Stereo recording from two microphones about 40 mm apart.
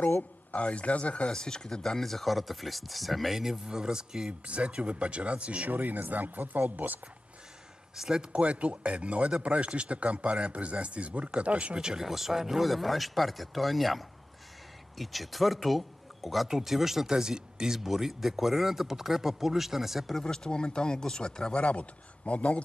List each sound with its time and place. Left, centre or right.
0.0 s speech: left
1.3 s speech: centre
4.3 s speech: right
5.7 s speech: right
7.9 s speech: centre
12.1 s speech: centre
17.1 s speech: centre
20.1 s speech: centre
21.5 s speech: left